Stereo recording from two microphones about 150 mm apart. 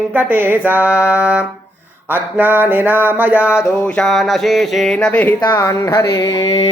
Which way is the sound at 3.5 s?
10° left (ahead or behind).